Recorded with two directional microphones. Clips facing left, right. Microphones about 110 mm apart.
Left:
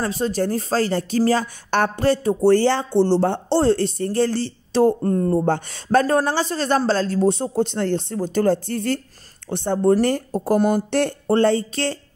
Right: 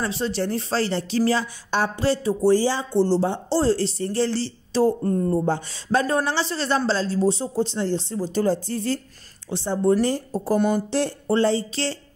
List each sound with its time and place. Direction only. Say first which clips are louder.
0.0 s speech: left 3 dB; 45° left (ahead or behind)